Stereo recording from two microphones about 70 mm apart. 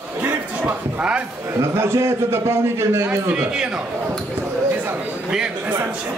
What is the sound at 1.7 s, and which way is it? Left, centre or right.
A man's voice, right.